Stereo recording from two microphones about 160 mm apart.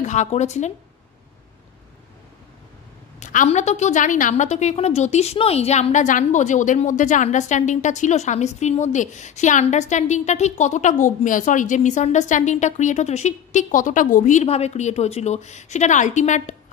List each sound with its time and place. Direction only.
0.0 s a woman's voice: 50° left (ahead or behind)
3.2 s a woman's voice: 50° left (ahead or behind)